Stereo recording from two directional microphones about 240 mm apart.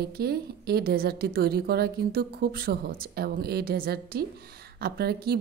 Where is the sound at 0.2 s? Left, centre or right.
Right.